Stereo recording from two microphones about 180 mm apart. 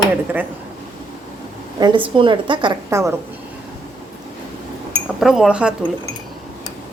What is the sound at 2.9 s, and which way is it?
Speech, 15° right (ahead or behind).